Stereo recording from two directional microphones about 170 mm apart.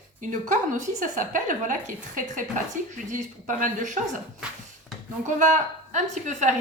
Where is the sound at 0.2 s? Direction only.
50° right (ahead or behind).